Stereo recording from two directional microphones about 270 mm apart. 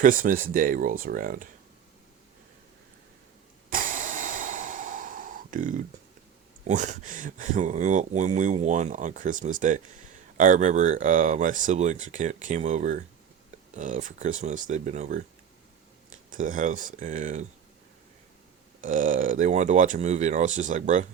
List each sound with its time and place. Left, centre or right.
0.0 s speech: right
3.7 s snort: right
6.7 s speech: right
16.3 s speech: right
18.8 s speech: right